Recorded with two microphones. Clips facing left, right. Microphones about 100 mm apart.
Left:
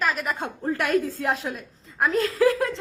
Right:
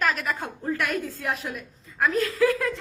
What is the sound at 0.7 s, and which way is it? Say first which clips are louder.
A woman's voice: left 4 dB; 35° left (ahead or behind).